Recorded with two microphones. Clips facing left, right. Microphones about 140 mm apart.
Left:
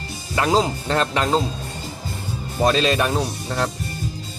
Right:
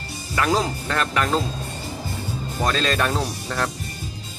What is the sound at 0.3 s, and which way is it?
Speech, 25° left (ahead or behind).